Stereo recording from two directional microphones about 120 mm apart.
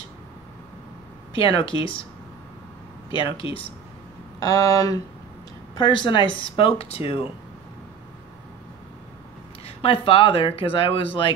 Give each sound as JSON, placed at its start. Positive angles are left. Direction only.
{"t": 1.3, "sound": "speech", "side_deg": 50}
{"t": 3.1, "sound": "speech", "side_deg": 45}
{"t": 4.4, "sound": "speech", "side_deg": 30}
{"t": 5.8, "sound": "speech", "side_deg": 45}
{"t": 9.7, "sound": "speech", "side_deg": 55}